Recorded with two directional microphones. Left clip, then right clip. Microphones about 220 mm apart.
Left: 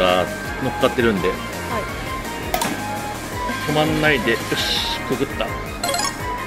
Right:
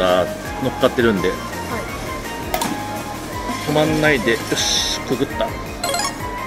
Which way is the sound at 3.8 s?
5° right (ahead or behind).